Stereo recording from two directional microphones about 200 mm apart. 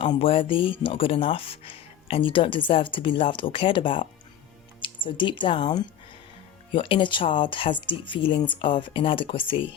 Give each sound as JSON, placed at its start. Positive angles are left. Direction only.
{"t": 0.0, "sound": "speech", "side_deg": 25}